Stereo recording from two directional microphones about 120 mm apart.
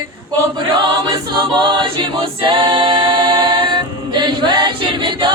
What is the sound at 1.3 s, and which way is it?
A capella, 45° right (ahead or behind).